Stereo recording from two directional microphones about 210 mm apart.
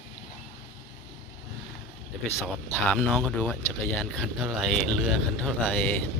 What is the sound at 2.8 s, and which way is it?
Speech, 5° left (ahead or behind).